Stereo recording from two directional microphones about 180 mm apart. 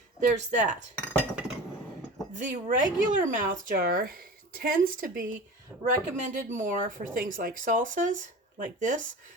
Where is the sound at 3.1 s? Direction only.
45° right (ahead or behind).